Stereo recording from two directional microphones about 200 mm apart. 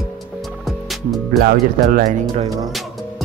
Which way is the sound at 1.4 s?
40° right (ahead or behind).